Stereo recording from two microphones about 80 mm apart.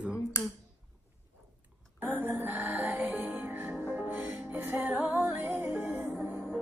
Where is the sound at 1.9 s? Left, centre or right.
Right.